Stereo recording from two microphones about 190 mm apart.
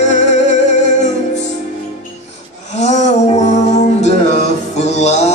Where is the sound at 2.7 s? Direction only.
35° left (ahead or behind).